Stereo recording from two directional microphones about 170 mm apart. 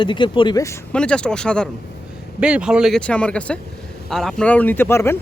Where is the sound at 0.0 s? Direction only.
30° left (ahead or behind).